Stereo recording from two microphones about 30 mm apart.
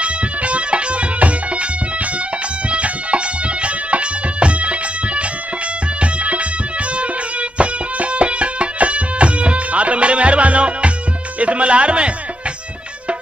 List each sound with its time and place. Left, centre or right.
0.0 s music: right
2.7 s music: right
7.5 s music: right